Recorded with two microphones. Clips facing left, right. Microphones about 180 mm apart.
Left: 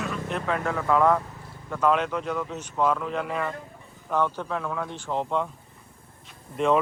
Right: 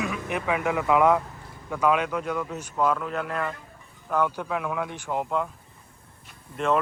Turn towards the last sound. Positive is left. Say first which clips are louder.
# left 2 dB
turn(degrees=0)  # may be behind; listen again after turning